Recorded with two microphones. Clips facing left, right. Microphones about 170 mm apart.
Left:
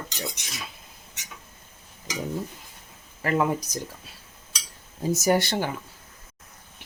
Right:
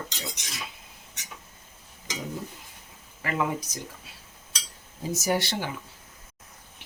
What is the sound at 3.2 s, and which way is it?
Speech, 40° left (ahead or behind).